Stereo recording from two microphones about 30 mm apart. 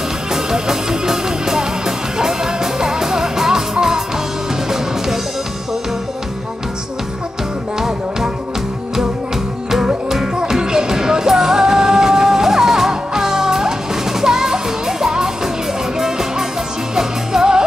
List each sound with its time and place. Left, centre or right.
0.3 s music: centre
10.3 s music: right